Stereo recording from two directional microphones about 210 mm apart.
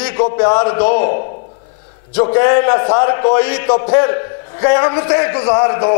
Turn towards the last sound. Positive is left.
turn(degrees=20)  # may be behind; listen again after turning